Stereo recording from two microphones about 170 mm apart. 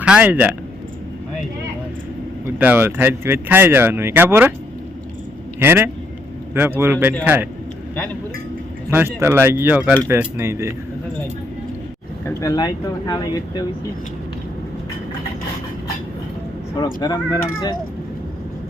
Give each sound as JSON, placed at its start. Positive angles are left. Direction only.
{"t": 0.0, "sound": "speech", "side_deg": -10}
{"t": 2.6, "sound": "speech", "side_deg": -10}
{"t": 5.5, "sound": "speech", "side_deg": -15}
{"t": 8.9, "sound": "speech", "side_deg": -15}
{"t": 12.2, "sound": "speech", "side_deg": 20}
{"t": 16.7, "sound": "speech", "side_deg": 25}